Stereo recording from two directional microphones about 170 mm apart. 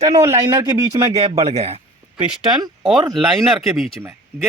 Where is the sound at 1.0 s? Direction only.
35° right (ahead or behind).